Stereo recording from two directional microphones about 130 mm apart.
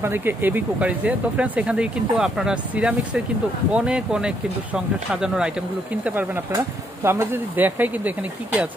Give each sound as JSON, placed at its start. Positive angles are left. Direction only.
{"t": 0.0, "sound": "speech", "side_deg": -15}
{"t": 6.5, "sound": "speech", "side_deg": -20}